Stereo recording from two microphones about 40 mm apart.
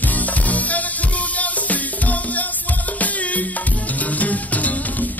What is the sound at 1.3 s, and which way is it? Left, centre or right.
Music, left.